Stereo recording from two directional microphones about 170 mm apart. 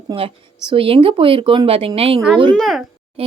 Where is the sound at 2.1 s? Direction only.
Centre (ahead or behind).